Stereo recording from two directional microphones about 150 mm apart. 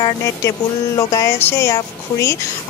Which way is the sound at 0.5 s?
20° left (ahead or behind).